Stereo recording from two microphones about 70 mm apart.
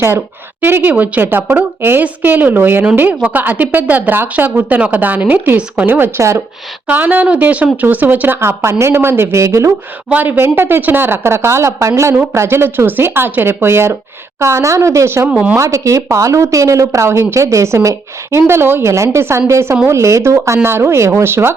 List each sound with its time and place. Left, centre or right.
0.6 s speech: right
6.1 s speech: right
6.8 s speech: right
8.4 s speech: right
10.1 s speech: right